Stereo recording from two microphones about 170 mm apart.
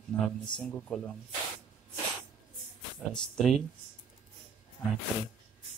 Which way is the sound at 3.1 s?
5° left (ahead or behind).